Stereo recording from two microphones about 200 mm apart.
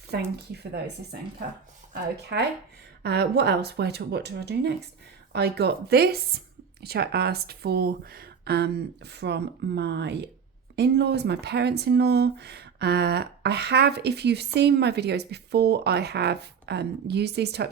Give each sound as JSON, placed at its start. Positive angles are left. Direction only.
{"t": 0.1, "sound": "speech", "side_deg": -55}
{"t": 1.9, "sound": "speech", "side_deg": -55}